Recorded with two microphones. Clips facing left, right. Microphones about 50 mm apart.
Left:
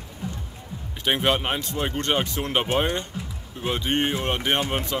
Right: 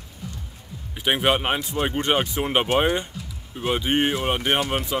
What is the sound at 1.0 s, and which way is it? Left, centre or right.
Speech, centre.